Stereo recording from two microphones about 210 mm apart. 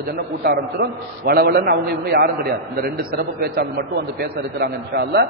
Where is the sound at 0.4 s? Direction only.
50° right (ahead or behind).